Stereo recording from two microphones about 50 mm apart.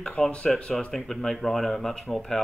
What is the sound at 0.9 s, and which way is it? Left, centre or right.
Speech, centre.